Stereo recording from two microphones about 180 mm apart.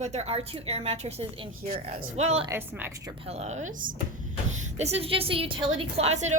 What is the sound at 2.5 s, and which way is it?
Speech, 15° right (ahead or behind).